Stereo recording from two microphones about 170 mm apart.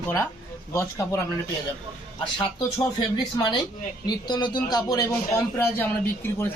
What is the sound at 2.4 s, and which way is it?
Speech, 25° left (ahead or behind).